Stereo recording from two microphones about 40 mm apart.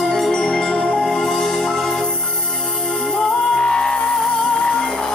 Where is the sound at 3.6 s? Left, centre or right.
Left.